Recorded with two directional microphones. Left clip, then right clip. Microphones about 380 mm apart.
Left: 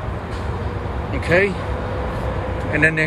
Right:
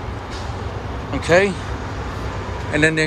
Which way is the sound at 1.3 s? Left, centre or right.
Centre.